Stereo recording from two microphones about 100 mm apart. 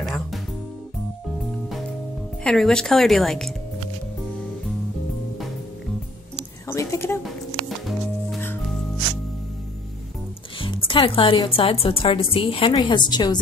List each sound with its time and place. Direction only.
0.0 s music: centre (ahead or behind)
2.4 s speech: 5° left (ahead or behind)
6.7 s a sound: 30° left (ahead or behind)
10.6 s music: 60° left (ahead or behind)
11.4 s a woman's voice: 65° left (ahead or behind)
12.8 s a woman's voice: 50° left (ahead or behind)